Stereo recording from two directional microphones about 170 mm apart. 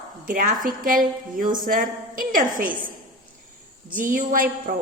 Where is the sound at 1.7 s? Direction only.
55° right (ahead or behind).